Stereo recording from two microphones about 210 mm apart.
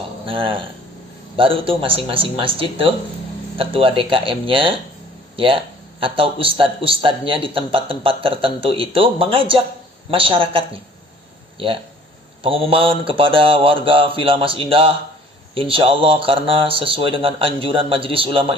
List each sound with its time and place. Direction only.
0.3 s a man's voice: 25° right (ahead or behind)